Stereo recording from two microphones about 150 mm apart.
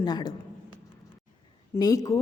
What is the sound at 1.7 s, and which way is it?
Speech, 25° left (ahead or behind).